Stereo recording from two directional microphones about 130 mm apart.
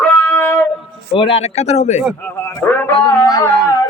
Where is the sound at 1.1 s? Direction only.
45° left (ahead or behind).